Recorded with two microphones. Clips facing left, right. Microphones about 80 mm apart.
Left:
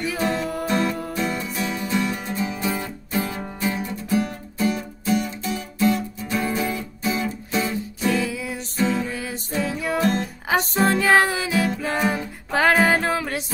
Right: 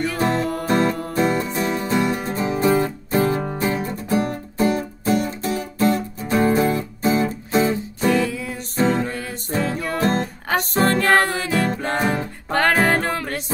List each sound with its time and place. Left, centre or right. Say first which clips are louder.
0.2 s music: right 2 dB; right
8.1 s music: right 3 dB; centre
8.7 s music: right 3 dB; right
9.0 s music: right 2 dB; centre
10.0 s music: right 3 dB; right
10.8 s music: right 1 dB; centre